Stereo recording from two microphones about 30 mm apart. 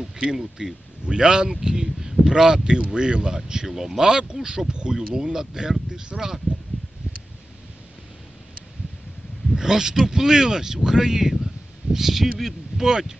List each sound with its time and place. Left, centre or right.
0.2 s speech: right
3.6 s speech: centre
6.1 s speech: centre
9.6 s speech: centre
12.8 s speech: centre